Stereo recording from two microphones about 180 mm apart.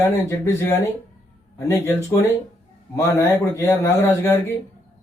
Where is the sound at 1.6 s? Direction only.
15° left (ahead or behind).